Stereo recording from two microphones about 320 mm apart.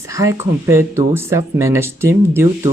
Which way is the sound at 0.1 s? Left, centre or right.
Centre.